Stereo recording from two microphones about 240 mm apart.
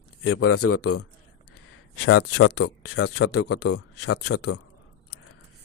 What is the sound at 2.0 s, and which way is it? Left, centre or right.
Speech, left.